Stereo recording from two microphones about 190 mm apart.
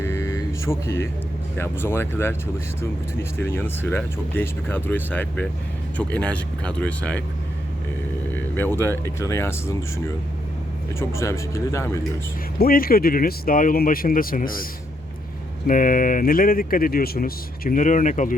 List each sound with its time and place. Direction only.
0.0 s a sound: 15° left (ahead or behind)
1.5 s speech: 10° left (ahead or behind)
8.3 s speech: 10° left (ahead or behind)
11.1 s speech: 15° left (ahead or behind)
12.5 s speech: 50° left (ahead or behind)